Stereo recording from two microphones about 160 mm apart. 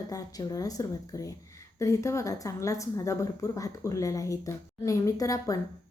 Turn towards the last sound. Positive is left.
turn(degrees=20)  # may be behind; listen again after turning